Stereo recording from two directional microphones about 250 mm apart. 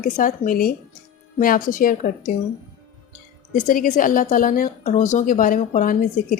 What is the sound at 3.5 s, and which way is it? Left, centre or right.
A woman's voice, left.